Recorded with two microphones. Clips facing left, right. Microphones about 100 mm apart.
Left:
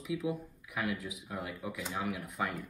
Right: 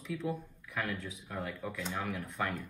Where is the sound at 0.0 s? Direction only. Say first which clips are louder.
Left 2 dB; 10° left (ahead or behind).